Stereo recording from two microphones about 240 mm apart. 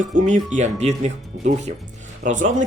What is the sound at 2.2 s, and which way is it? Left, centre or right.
Speech, right.